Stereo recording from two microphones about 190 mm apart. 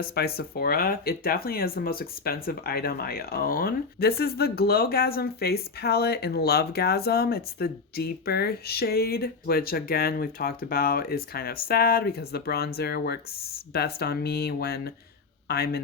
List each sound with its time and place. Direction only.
0.0 s speech: 55° left (ahead or behind)